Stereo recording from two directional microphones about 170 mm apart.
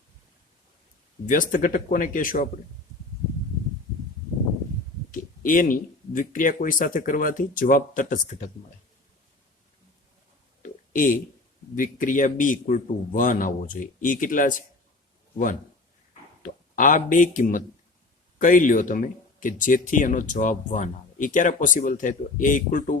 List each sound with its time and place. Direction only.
1.3 s speech: 55° left (ahead or behind)
5.4 s speech: 50° left (ahead or behind)
10.6 s a sound: 50° left (ahead or behind)
11.8 s speech: 50° left (ahead or behind)
16.4 s speech: 50° left (ahead or behind)